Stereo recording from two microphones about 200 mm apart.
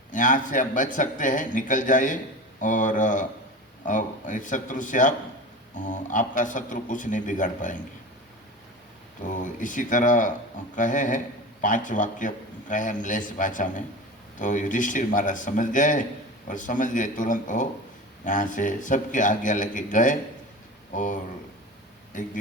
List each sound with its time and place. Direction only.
0.1 s a man's voice: 40° left (ahead or behind)
9.2 s a man's voice: 40° left (ahead or behind)